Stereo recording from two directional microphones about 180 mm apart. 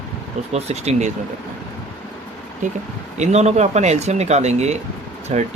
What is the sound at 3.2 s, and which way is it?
Speech, 40° right (ahead or behind).